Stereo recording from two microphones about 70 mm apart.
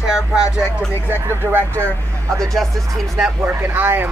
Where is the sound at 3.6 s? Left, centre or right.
Right.